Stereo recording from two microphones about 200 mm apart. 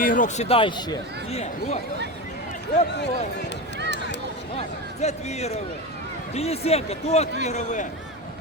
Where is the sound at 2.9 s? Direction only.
60° left (ahead or behind).